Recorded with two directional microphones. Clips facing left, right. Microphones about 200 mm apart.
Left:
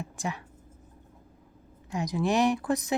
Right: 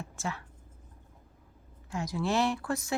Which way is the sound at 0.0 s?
15° left (ahead or behind).